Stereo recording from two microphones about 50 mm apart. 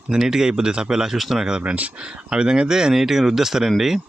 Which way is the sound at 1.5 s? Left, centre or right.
Centre.